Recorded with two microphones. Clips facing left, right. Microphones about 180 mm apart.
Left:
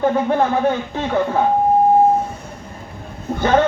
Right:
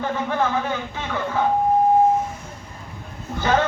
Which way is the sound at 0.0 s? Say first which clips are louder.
Left 7 dB; 40° left (ahead or behind).